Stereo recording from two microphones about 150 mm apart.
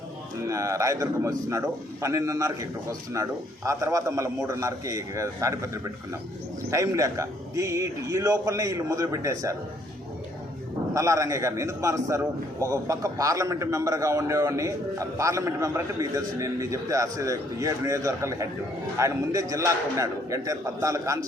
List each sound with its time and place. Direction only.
0.4 s a man's voice: 20° right (ahead or behind)
10.9 s a man's voice: 20° right (ahead or behind)